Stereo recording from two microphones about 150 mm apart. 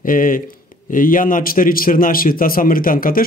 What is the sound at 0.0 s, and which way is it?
A man's voice, 65° left (ahead or behind).